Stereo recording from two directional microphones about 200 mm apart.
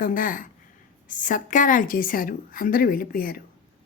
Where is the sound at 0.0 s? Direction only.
40° left (ahead or behind).